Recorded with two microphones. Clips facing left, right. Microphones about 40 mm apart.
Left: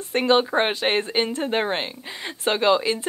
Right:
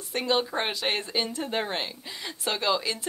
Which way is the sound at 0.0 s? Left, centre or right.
Left.